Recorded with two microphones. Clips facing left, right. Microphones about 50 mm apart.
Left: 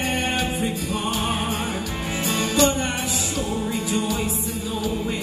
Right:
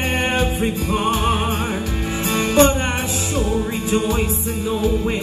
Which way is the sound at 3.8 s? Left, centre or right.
Right.